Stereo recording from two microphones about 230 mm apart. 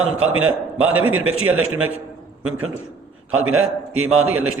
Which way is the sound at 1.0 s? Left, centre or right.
Right.